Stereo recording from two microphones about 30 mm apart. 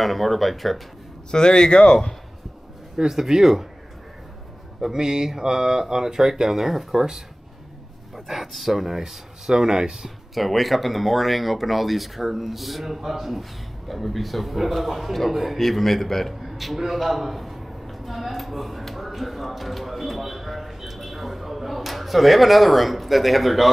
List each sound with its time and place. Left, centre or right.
0.0 s speech: centre
1.3 s speech: left
3.0 s speech: centre
4.9 s speech: centre
8.3 s speech: centre; by 9.9 s right
10.0 s a man's voice: centre
16.4 s a man's voice: centre